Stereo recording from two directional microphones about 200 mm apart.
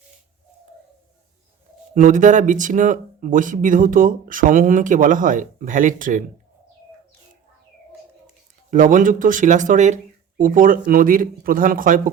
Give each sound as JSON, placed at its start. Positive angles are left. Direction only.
{"t": 2.0, "sound": "speech", "side_deg": -40}
{"t": 8.7, "sound": "speech", "side_deg": -40}